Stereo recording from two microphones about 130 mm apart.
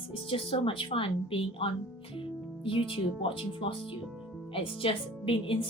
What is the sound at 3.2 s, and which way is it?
A woman's voice, 45° left (ahead or behind).